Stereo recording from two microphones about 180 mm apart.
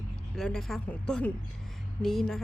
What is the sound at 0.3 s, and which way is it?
Speech, 5° left (ahead or behind).